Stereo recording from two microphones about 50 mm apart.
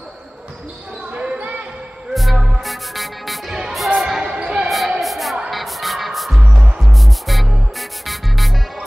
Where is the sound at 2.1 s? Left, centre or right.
Centre.